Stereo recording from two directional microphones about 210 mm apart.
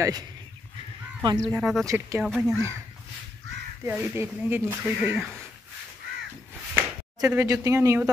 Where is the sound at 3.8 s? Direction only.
10° right (ahead or behind).